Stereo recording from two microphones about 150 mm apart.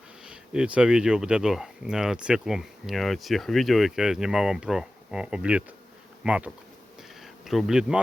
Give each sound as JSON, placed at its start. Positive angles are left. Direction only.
{"t": 0.3, "sound": "speech", "side_deg": -5}
{"t": 6.2, "sound": "bee", "side_deg": -5}